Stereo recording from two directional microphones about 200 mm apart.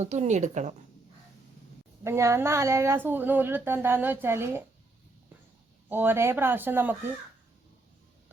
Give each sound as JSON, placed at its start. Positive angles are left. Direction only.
{"t": 0.0, "sound": "a woman's voice", "side_deg": -35}
{"t": 2.0, "sound": "a woman's voice", "side_deg": -15}
{"t": 5.9, "sound": "a woman's voice", "side_deg": -10}